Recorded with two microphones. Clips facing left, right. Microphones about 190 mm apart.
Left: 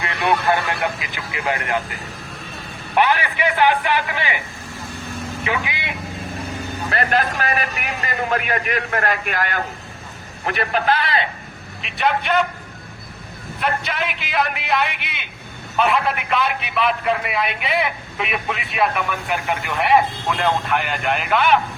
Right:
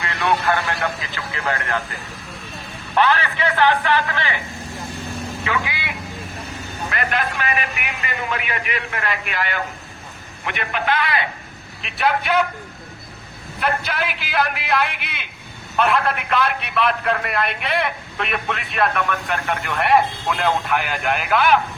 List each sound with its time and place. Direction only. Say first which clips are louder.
0.0 s speech: left 1 dB; 20° left (ahead or behind)
2.9 s speech: even; 15° left (ahead or behind)
5.4 s speech: left 1 dB; 20° left (ahead or behind)
6.9 s a man's voice: left 4 dB; 35° left (ahead or behind)
11.8 s a man's voice: even; centre (ahead or behind)
13.6 s a man's voice: even; centre (ahead or behind)